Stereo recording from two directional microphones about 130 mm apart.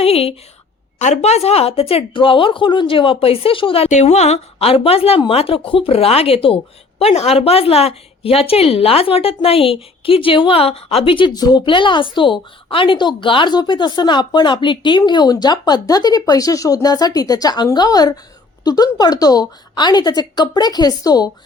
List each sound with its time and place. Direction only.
0.0 s a sound: 50° left (ahead or behind)
0.9 s speech: 60° left (ahead or behind); by 3.8 s 45° left (ahead or behind)
3.8 s speech: 65° left (ahead or behind); by 21.2 s 30° left (ahead or behind)